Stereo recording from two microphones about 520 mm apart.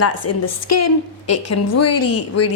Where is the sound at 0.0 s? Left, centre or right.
Left.